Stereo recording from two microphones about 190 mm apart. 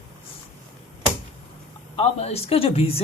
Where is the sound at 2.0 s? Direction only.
35° left (ahead or behind).